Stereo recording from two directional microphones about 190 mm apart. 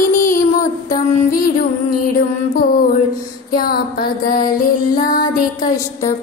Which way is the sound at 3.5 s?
50° left (ahead or behind).